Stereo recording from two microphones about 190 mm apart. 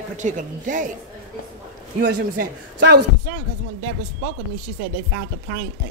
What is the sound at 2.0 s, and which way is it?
Speech, 60° right (ahead or behind).